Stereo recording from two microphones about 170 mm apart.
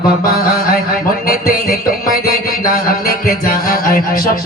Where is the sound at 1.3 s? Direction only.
60° left (ahead or behind).